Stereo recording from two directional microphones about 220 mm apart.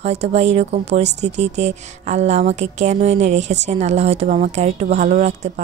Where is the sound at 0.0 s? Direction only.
30° right (ahead or behind).